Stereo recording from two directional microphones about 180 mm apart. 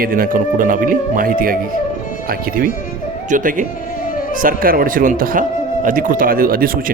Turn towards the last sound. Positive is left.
turn(degrees=-55)  # may be behind; listen again after turning